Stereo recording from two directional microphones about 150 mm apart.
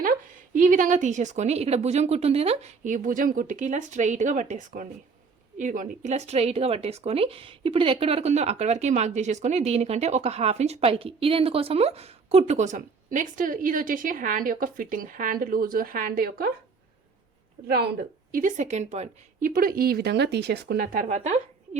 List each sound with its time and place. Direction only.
0.0 s a woman's voice: 65° right (ahead or behind); by 16.5 s 85° right
17.7 s a woman's voice: 90° right; by 21.8 s 50° right (ahead or behind)